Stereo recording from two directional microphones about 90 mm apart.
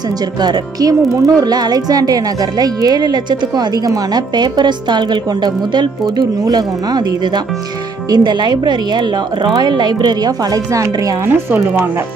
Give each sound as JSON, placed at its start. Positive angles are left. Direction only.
{"t": 0.4, "sound": "speech", "side_deg": -45}
{"t": 8.1, "sound": "a woman's voice", "side_deg": -55}
{"t": 11.2, "sound": "speech", "side_deg": -20}